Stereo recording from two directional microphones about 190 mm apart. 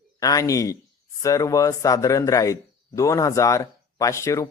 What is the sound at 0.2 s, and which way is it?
Speech, 20° left (ahead or behind).